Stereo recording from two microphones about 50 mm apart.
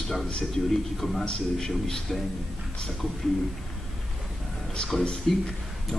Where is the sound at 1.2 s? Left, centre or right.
Centre.